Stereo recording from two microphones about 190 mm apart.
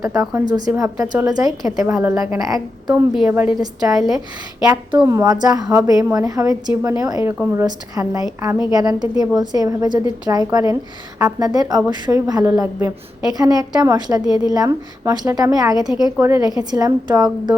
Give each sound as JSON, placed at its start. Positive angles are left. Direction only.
{"t": 0.0, "sound": "a woman's voice", "side_deg": -15}
{"t": 3.9, "sound": "speech", "side_deg": 0}
{"t": 4.6, "sound": "a woman's voice", "side_deg": -20}